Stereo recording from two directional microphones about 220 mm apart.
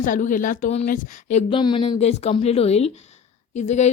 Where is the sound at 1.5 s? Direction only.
20° left (ahead or behind).